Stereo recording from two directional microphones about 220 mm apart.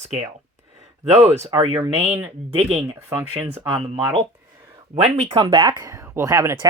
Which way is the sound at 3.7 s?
25° right (ahead or behind).